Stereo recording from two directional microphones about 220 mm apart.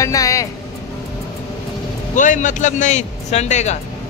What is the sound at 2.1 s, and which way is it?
Speech, 35° left (ahead or behind).